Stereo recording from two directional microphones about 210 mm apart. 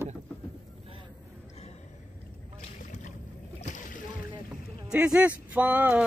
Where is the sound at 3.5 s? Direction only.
35° left (ahead or behind).